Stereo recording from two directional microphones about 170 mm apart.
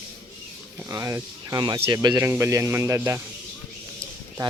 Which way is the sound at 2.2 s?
15° right (ahead or behind).